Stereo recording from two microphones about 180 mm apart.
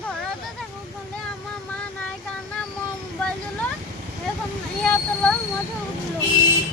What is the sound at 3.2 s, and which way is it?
Speech, 5° left (ahead or behind).